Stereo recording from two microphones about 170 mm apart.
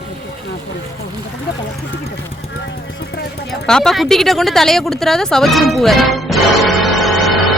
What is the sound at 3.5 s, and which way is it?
A woman's voice, 5° left (ahead or behind).